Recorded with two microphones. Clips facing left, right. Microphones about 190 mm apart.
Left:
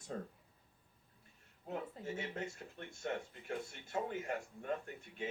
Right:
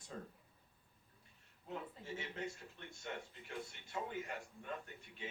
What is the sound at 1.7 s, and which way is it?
A man's voice, 45° left (ahead or behind).